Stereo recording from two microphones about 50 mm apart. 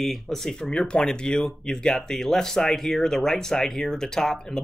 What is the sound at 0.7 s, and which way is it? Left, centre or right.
Speech, centre.